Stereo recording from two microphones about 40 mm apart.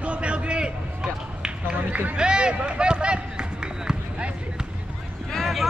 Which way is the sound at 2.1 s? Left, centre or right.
Right.